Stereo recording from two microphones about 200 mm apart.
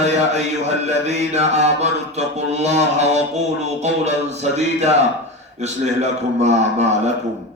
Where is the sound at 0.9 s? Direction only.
35° right (ahead or behind).